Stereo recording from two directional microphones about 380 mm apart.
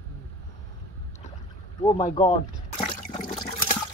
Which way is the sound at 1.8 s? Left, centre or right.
Centre.